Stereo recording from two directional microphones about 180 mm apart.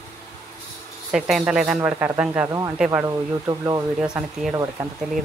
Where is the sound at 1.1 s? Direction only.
5° right (ahead or behind); by 4.1 s 20° right (ahead or behind).